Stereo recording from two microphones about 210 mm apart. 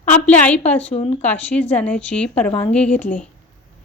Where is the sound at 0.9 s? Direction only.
30° left (ahead or behind).